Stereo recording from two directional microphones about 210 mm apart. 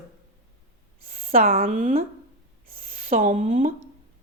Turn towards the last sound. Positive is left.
turn(degrees=-35)  # may be behind; listen again after turning